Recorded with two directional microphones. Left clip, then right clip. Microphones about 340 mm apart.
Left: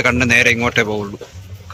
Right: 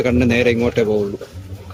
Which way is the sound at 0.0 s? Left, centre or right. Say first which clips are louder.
Left 3 dB; centre.